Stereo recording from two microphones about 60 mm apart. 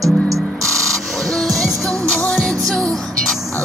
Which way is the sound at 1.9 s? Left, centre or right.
Centre.